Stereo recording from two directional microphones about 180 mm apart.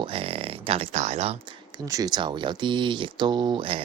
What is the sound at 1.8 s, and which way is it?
Speech, 20° right (ahead or behind).